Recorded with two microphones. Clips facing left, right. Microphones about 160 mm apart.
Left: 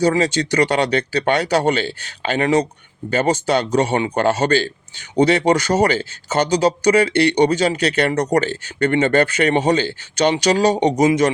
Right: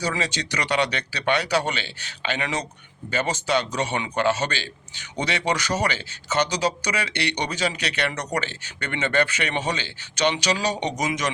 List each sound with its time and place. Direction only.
0.0 s speech: 50° left (ahead or behind)
10.9 s a man's voice: 30° left (ahead or behind)